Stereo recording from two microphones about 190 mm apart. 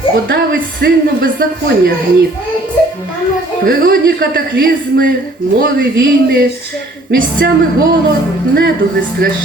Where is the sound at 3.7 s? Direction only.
50° right (ahead or behind).